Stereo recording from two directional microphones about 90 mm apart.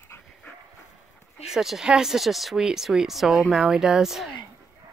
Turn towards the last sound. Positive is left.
turn(degrees=-5)  # may be behind; listen again after turning